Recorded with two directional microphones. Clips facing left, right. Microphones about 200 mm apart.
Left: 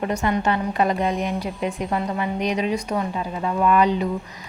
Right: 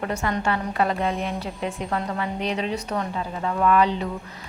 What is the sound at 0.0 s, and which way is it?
A woman's voice, 20° left (ahead or behind).